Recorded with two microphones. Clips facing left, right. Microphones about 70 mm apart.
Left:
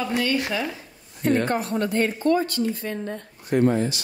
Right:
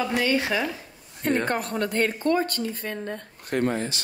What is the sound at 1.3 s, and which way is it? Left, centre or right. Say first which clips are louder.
Speech: left 2 dB; right.